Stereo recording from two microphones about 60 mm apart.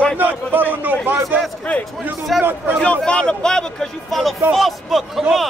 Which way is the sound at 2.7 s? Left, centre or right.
Centre.